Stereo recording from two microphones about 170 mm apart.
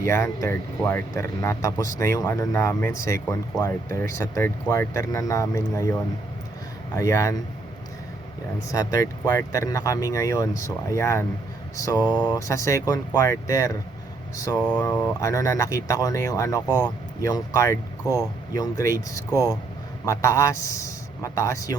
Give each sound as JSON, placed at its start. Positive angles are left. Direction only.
{"t": 0.1, "sound": "speech", "side_deg": 15}
{"t": 8.7, "sound": "speech", "side_deg": 20}